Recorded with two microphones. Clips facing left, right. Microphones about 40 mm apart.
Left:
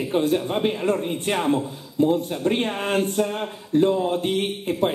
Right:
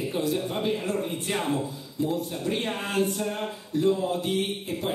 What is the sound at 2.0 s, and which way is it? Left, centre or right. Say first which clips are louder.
A man's voice: left 8 dB; left.